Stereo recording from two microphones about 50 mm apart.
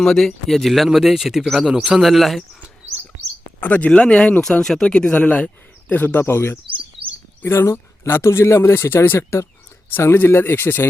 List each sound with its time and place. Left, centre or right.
0.0 s speech: centre
0.9 s speech: centre
1.6 s speech: centre
2.0 s speech: centre
3.7 s speech: left; by 4.9 s centre
4.9 s speech: centre
5.1 s speech: left
6.2 s speech: left